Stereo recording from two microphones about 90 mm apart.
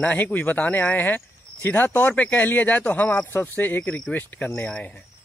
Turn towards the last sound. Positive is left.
turn(degrees=15)  # may be behind; listen again after turning